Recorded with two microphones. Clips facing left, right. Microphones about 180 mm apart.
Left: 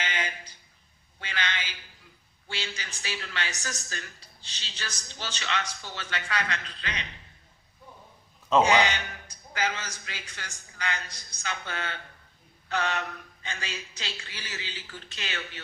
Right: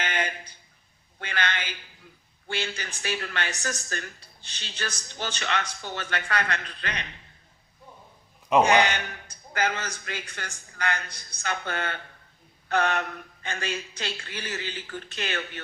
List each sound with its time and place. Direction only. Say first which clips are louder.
0.0 s a sound: right 4 dB; 55° right (ahead or behind)
2.5 s a woman's voice: right 5 dB; 55° right (ahead or behind)
8.6 s a woman's voice: right 2 dB; 55° right (ahead or behind)